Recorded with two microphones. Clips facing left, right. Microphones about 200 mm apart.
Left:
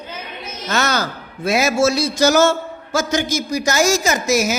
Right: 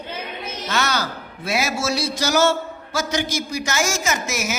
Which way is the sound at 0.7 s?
45° left (ahead or behind).